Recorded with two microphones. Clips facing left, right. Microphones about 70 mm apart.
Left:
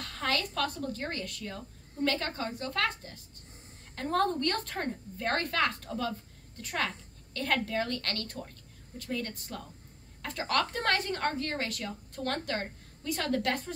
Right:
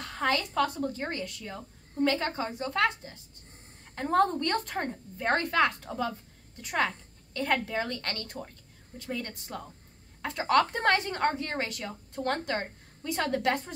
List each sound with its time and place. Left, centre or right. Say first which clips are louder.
0.0 s a woman's voice: right 3 dB; centre